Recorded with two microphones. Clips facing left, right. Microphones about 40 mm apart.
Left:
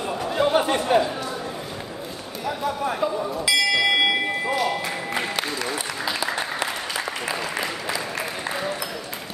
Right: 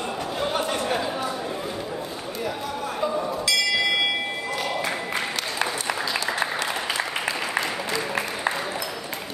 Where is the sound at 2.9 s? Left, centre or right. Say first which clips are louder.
Left 1 dB; centre.